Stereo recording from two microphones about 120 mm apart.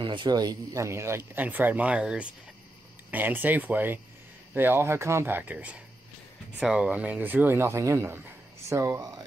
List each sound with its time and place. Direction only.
0.0 s speech: 40° right (ahead or behind); by 9.2 s 25° right (ahead or behind)